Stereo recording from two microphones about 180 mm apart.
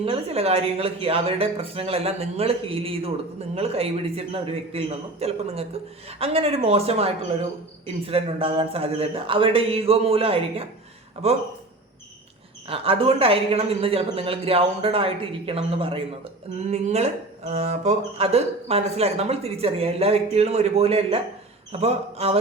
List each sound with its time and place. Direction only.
0.0 s speech: 35° right (ahead or behind)
12.6 s speech: 30° right (ahead or behind)